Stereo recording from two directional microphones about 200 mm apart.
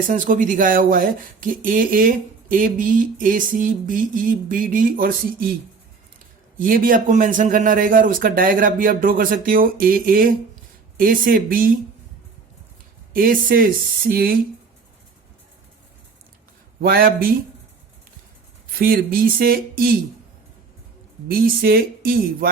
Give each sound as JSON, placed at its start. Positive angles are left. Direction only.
{"t": 0.1, "sound": "speech", "side_deg": -40}
{"t": 6.6, "sound": "speech", "side_deg": -45}
{"t": 13.1, "sound": "speech", "side_deg": -45}
{"t": 16.8, "sound": "speech", "side_deg": -45}
{"t": 18.8, "sound": "speech", "side_deg": -45}
{"t": 21.2, "sound": "speech", "side_deg": -50}